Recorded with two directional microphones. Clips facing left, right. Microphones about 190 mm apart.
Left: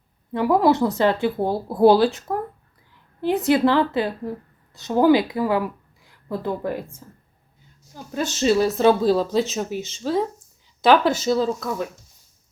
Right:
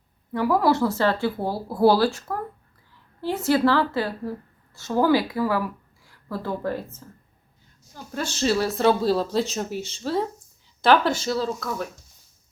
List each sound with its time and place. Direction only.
0.3 s a woman's voice: 20° left (ahead or behind)
8.1 s speech: 20° left (ahead or behind)
9.0 s speech: centre (ahead or behind)
11.3 s speech: 20° left (ahead or behind)